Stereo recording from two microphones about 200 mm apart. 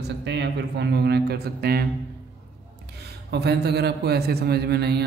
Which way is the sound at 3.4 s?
55° right (ahead or behind).